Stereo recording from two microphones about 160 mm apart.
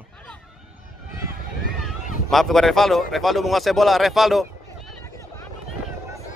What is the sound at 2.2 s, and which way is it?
A man's voice, centre (ahead or behind).